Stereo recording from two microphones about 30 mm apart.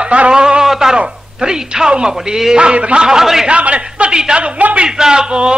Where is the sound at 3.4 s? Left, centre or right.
Right.